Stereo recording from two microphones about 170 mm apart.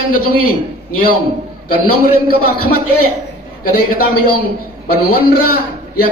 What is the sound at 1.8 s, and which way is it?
A man's voice, 60° left (ahead or behind).